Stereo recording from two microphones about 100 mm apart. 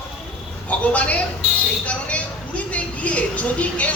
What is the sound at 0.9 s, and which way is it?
A woman's voice, 15° left (ahead or behind).